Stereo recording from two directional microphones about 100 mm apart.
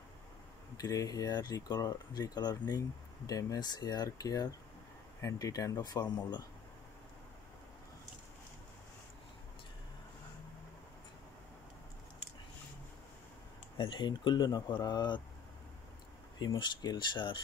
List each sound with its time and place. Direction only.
0.7 s speech: 40° left (ahead or behind)
13.7 s speech: 55° left (ahead or behind)
16.3 s speech: 45° left (ahead or behind)